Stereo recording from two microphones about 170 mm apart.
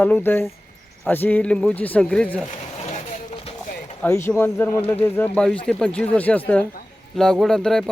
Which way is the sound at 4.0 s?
15° left (ahead or behind).